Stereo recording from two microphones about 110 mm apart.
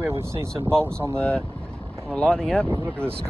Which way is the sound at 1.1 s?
10° left (ahead or behind).